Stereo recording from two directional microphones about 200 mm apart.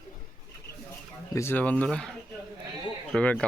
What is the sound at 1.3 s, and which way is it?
Speech, 10° left (ahead or behind).